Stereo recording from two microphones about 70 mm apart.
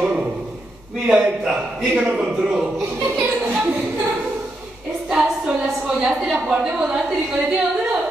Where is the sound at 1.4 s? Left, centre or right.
Centre.